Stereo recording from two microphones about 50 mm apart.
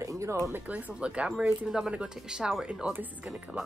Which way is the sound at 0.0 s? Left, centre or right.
Right.